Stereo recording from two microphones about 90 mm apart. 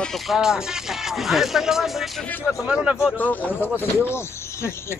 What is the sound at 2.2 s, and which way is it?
A man's voice, 20° left (ahead or behind).